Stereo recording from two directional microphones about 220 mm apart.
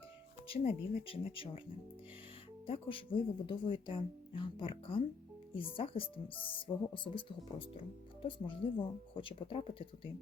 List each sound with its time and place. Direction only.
0.4 s speech: 25° left (ahead or behind)
2.6 s speech: 25° left (ahead or behind)